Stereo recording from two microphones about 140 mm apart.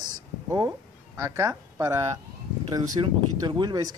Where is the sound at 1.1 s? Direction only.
20° right (ahead or behind).